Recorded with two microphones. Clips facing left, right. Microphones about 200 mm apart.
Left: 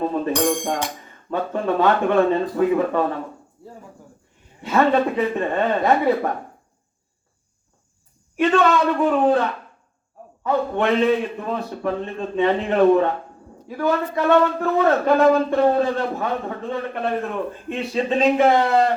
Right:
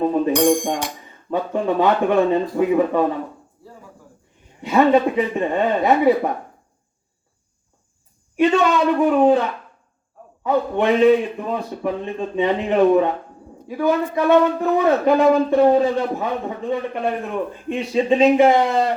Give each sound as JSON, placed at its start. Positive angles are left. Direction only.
{"t": 0.0, "sound": "speech", "side_deg": -15}
{"t": 4.6, "sound": "speech", "side_deg": -15}
{"t": 8.4, "sound": "speech", "side_deg": -15}
{"t": 10.4, "sound": "speech", "side_deg": -15}